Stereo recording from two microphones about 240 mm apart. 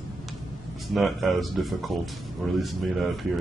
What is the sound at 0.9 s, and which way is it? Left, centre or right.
A man's voice, centre.